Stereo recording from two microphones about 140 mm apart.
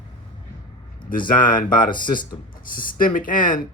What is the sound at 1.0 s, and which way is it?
Speech, 80° left.